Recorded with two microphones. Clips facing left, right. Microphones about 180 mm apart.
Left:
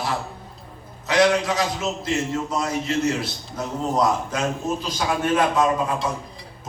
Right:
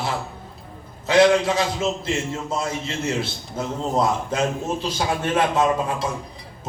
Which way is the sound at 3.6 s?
25° right (ahead or behind).